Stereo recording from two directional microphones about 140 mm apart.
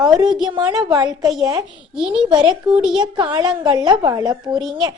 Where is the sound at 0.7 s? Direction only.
25° right (ahead or behind).